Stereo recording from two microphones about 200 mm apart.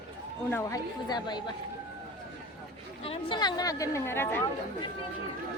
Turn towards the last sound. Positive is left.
turn(degrees=10)  # may be behind; listen again after turning